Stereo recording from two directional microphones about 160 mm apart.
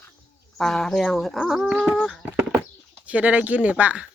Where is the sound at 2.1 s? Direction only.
5° right (ahead or behind).